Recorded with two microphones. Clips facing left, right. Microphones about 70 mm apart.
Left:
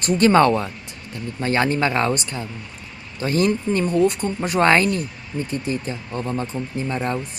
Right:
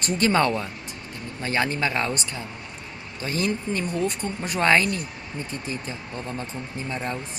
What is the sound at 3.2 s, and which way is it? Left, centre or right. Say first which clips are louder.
A man's voice: left 7 dB; left.